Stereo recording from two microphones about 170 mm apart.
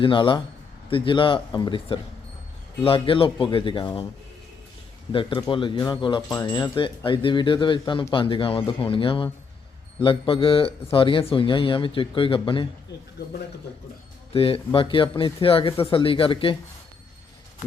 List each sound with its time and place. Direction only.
0.0 s speech: 30° left (ahead or behind)
5.1 s speech: 30° left (ahead or behind)
14.3 s speech: 35° left (ahead or behind)